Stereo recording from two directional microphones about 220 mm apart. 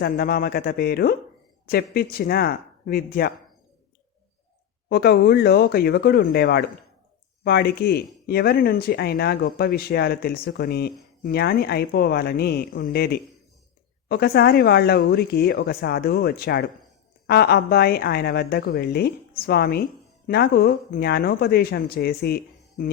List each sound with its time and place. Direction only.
0.0 s speech: 45° left (ahead or behind)
4.9 s speech: 45° left (ahead or behind)